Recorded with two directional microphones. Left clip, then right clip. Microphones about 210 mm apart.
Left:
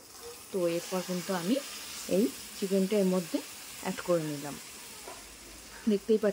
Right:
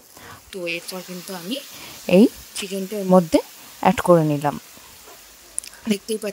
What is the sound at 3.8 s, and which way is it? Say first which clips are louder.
Speech: right 15 dB; 45° right (ahead or behind).